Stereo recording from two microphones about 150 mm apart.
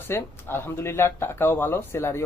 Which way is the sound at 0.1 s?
15° left (ahead or behind).